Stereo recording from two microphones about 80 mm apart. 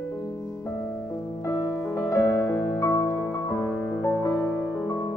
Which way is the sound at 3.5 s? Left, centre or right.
Centre.